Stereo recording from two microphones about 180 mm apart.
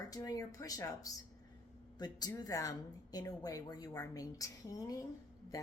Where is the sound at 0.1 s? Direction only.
20° left (ahead or behind).